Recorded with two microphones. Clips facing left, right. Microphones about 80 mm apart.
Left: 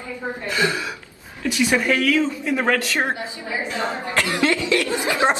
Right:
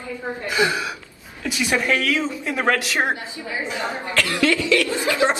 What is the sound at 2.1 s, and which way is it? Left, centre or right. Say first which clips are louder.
A man's voice: left 3 dB; centre.